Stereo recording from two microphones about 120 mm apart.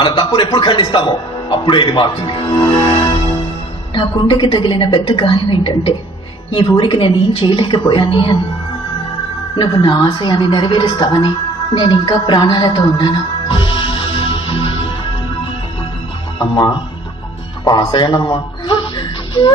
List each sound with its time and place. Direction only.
0.0 s a man's voice: 40° left (ahead or behind)
9.6 s a woman's voice: 40° left (ahead or behind)
11.8 s music: 40° left (ahead or behind)
16.4 s a woman's voice: 40° left (ahead or behind)
19.3 s music: 40° left (ahead or behind)